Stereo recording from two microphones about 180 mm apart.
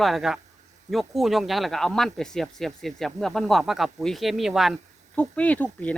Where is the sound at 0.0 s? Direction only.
Centre (ahead or behind).